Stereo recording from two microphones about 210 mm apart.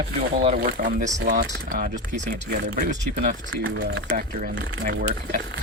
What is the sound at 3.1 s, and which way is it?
Speech, 55° right (ahead or behind).